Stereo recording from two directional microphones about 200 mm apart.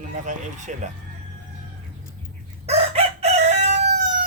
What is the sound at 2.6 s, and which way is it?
Chicken, 30° right (ahead or behind).